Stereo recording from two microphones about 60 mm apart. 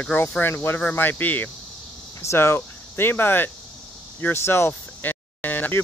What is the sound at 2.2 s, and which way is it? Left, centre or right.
Speech, left.